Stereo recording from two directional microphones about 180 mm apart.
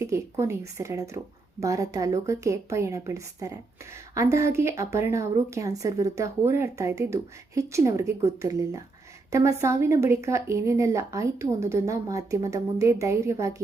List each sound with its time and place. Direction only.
0.0 s speech: 15° right (ahead or behind)